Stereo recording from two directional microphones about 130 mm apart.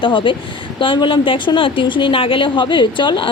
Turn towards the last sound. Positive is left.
turn(degrees=40)  # may be behind; listen again after turning